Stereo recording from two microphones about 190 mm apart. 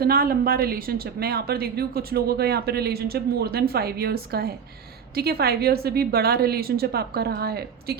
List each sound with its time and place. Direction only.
0.0 s a woman's voice: 50° right (ahead or behind)